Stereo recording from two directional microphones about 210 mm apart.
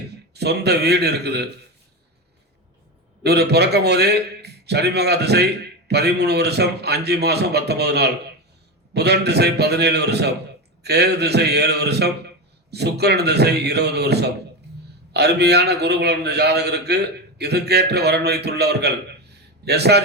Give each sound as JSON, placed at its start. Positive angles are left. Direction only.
{"t": 0.1, "sound": "a man's voice", "side_deg": -50}
{"t": 3.2, "sound": "a man's voice", "side_deg": -50}